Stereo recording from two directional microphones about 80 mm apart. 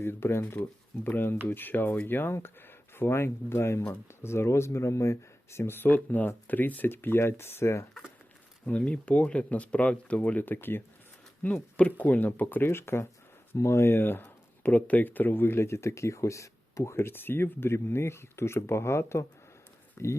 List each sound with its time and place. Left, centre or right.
0.0 s speech: left
8.6 s speech: centre; by 20.1 s left